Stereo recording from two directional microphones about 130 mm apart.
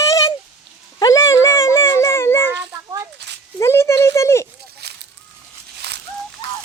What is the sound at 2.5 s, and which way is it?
Children playing, 20° right (ahead or behind).